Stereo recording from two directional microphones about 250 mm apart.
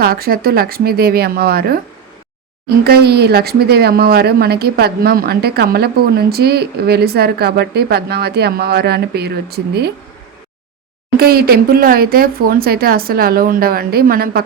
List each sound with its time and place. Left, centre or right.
0.0 s speech: right
11.2 s speech: right